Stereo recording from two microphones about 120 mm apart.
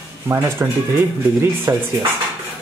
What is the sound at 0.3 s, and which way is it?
Speech, 20° right (ahead or behind).